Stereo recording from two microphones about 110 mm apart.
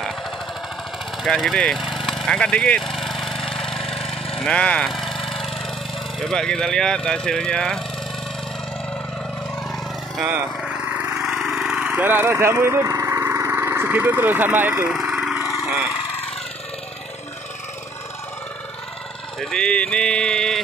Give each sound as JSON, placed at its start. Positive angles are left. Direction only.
{"t": 1.2, "sound": "speech", "side_deg": 0}
{"t": 2.1, "sound": "vehicle", "side_deg": 5}
{"t": 6.1, "sound": "speech", "side_deg": 5}
{"t": 10.2, "sound": "a sound", "side_deg": -15}
{"t": 14.9, "sound": "lawn mower", "side_deg": -10}
{"t": 19.4, "sound": "speech", "side_deg": 5}